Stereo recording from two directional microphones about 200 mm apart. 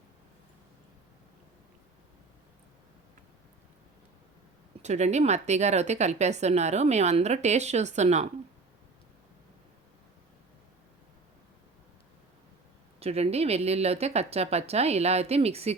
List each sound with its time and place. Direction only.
4.8 s a woman's voice: 35° right (ahead or behind)
13.0 s a woman's voice: 30° right (ahead or behind)